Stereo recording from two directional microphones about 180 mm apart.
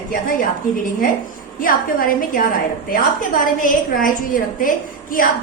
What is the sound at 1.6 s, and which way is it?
A woman's voice, 50° left (ahead or behind).